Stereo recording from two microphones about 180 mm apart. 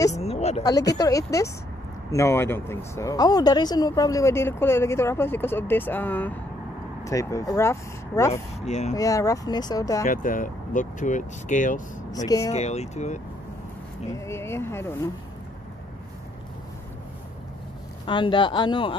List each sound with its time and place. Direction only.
0.1 s a sound: 35° left (ahead or behind)
0.7 s speech: 20° left (ahead or behind)
8.5 s speech: 40° left (ahead or behind)
8.9 s speech: 20° left (ahead or behind)
10.0 s speech: 50° left (ahead or behind)
12.3 s speech: 20° left (ahead or behind)
12.5 s speech: 35° left (ahead or behind)
14.1 s speech: 15° left (ahead or behind)
18.0 s speech: 25° left (ahead or behind)